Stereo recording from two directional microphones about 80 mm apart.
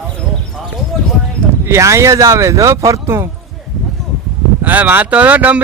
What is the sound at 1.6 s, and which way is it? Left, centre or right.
Speech, right.